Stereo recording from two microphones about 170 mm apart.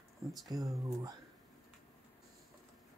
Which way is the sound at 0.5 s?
20° right (ahead or behind).